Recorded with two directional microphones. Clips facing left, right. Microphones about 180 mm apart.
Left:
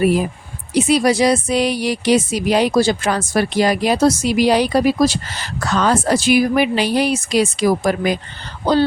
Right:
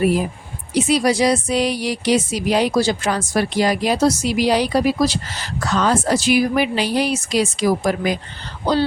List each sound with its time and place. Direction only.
0.8 s speech: 60° left (ahead or behind)